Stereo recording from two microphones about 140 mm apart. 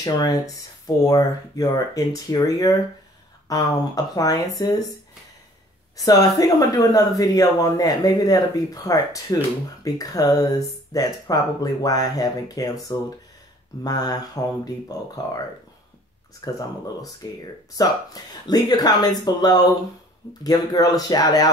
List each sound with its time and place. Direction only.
0.0 s speech: 25° left (ahead or behind)
5.9 s speech: 25° left (ahead or behind)
16.3 s speech: 25° left (ahead or behind)